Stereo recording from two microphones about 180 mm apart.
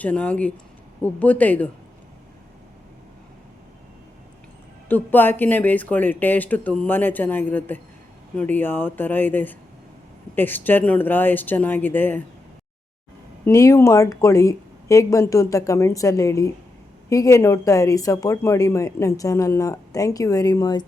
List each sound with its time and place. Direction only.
0.0 s a woman's voice: 10° left (ahead or behind)
4.9 s a woman's voice: 10° left (ahead or behind)
13.4 s a woman's voice: 15° left (ahead or behind)